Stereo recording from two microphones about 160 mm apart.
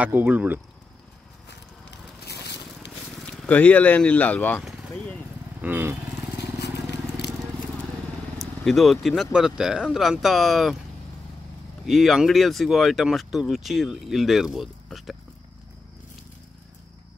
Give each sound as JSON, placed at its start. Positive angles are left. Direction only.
{"t": 0.0, "sound": "speech", "side_deg": -10}
{"t": 2.2, "sound": "a sound", "side_deg": 90}
{"t": 3.2, "sound": "speech", "side_deg": 5}
{"t": 5.6, "sound": "vehicle", "side_deg": -15}
{"t": 6.6, "sound": "vehicle", "side_deg": 90}
{"t": 8.6, "sound": "speech", "side_deg": 0}
{"t": 11.8, "sound": "speech", "side_deg": 0}